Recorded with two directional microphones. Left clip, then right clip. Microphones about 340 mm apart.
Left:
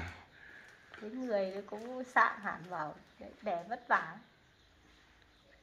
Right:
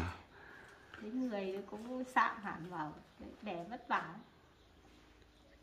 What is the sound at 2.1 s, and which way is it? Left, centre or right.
Speech, centre.